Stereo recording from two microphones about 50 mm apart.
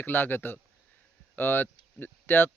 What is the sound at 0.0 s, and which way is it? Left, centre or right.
Speech, left.